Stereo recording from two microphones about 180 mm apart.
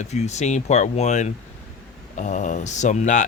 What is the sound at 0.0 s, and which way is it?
Speech, 40° left (ahead or behind).